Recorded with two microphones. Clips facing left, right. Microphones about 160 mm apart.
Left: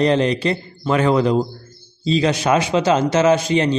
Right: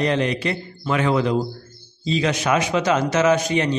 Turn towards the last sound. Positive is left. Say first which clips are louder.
# left 3 dB
turn(degrees=30)  # may be behind; listen again after turning